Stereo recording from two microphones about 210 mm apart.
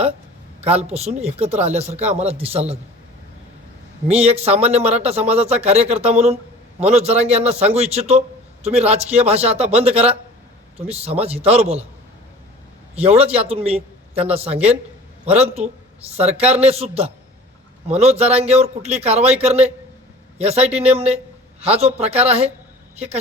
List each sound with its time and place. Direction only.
0.6 s speech: 30° right (ahead or behind)
4.1 s a man's voice: 30° right (ahead or behind)
13.0 s a man's voice: 30° right (ahead or behind)
15.3 s a man's voice: 30° right (ahead or behind)